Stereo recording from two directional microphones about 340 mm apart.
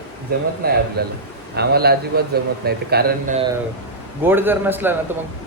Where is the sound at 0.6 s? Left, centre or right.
Right.